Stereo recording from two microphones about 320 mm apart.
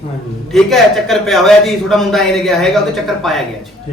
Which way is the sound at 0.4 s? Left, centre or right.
Centre.